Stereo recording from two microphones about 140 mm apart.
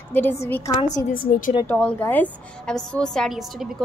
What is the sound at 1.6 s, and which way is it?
A woman's voice, 10° left (ahead or behind).